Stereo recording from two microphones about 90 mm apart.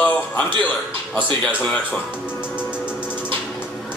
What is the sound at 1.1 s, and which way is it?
Speech, 15° left (ahead or behind).